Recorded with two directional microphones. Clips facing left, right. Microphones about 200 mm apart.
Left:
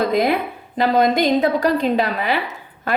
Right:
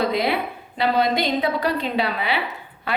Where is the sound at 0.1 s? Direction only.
45° left (ahead or behind).